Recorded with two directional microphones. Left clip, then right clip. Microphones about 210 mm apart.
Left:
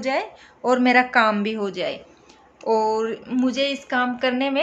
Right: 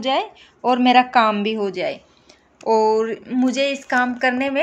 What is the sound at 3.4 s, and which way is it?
Speech, 35° right (ahead or behind).